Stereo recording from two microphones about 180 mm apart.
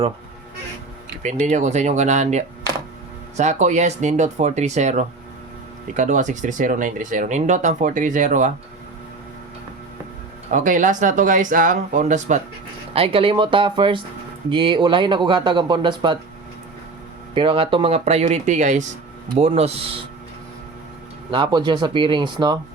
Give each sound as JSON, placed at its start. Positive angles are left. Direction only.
{"t": 1.2, "sound": "speech", "side_deg": -40}
{"t": 10.5, "sound": "speech", "side_deg": -45}
{"t": 12.9, "sound": "speech", "side_deg": -30}
{"t": 17.3, "sound": "speech", "side_deg": -30}
{"t": 21.2, "sound": "speech", "side_deg": -25}